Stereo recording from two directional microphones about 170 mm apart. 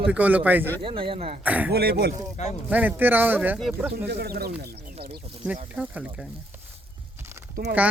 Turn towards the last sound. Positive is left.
turn(degrees=-65)  # may be behind; listen again after turning